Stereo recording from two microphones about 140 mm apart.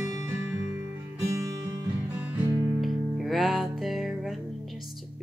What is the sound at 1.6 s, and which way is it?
Music, 25° right (ahead or behind).